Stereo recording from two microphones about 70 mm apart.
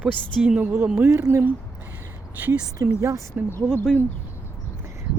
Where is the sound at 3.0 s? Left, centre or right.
Right.